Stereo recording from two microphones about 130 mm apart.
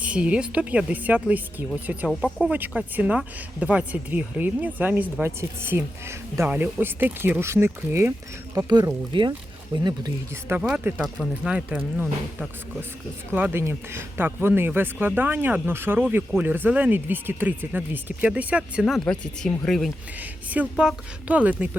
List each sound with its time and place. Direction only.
0.0 s speech: 10° right (ahead or behind)
8.5 s speech: 30° right (ahead or behind)
10.5 s speech: 20° right (ahead or behind)
19.0 s speech: 5° left (ahead or behind)
20.1 s speech: 10° right (ahead or behind)